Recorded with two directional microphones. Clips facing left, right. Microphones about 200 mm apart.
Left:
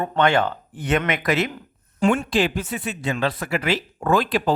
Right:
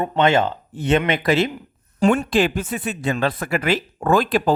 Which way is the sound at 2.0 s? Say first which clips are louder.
Right 2 dB; 40° right (ahead or behind).